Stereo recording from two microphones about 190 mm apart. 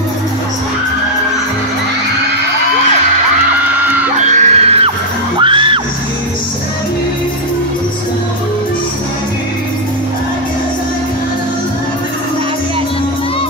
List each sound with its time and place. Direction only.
3.8 s music: 10° right (ahead or behind)
4.2 s music: 40° right (ahead or behind)